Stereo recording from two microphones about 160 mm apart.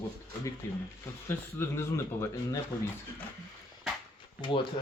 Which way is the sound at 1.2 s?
15° left (ahead or behind).